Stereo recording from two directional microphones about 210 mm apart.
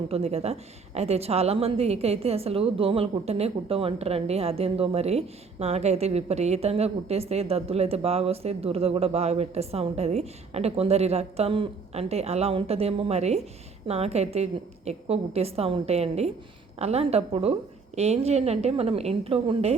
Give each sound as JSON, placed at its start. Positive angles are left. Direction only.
{"t": 0.1, "sound": "a woman's voice", "side_deg": -30}